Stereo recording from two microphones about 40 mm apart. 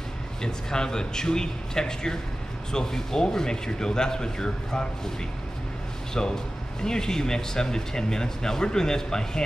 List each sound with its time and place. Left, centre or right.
0.4 s speech: centre
6.1 s speech: centre